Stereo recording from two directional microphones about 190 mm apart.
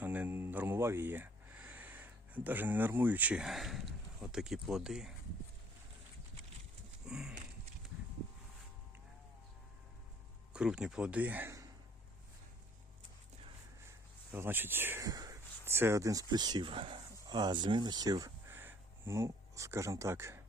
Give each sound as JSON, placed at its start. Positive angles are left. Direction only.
{"t": 0.0, "sound": "speech", "side_deg": -10}
{"t": 7.1, "sound": "a sound", "side_deg": -5}
{"t": 10.5, "sound": "speech", "side_deg": -5}
{"t": 14.3, "sound": "speech", "side_deg": -10}